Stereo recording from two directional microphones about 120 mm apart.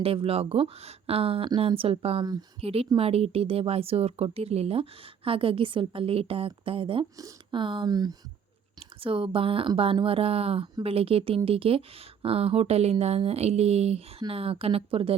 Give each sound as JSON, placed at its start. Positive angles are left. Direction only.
{"t": 0.0, "sound": "a woman's voice", "side_deg": -50}
{"t": 8.8, "sound": "a woman's voice", "side_deg": -50}